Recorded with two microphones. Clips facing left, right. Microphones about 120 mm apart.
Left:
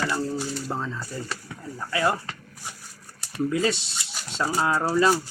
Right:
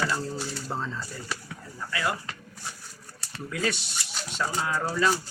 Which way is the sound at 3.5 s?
25° left (ahead or behind).